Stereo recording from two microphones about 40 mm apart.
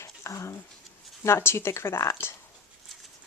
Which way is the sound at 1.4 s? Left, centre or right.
Left.